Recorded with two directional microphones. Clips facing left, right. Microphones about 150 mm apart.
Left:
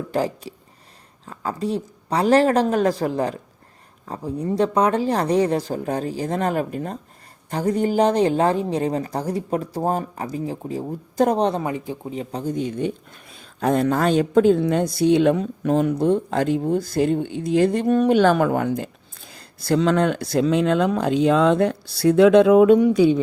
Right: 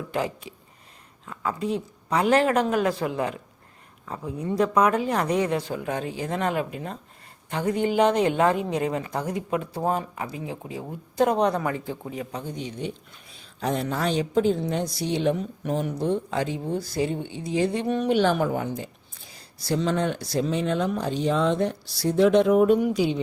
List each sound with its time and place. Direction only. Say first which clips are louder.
0.1 s speech: left 5 dB; 35° left (ahead or behind); by 16.0 s 75° left (ahead or behind)
16.0 s speech: left 6 dB; 50° left (ahead or behind)
18.3 s a woman's voice: left 6 dB; 65° left (ahead or behind); by 22.7 s 90° left